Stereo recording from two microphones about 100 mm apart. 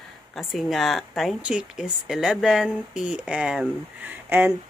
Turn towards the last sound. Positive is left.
turn(degrees=-20)  # may be behind; listen again after turning